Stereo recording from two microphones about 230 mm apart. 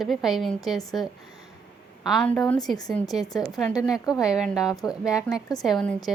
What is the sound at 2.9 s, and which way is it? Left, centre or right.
A woman's voice, centre.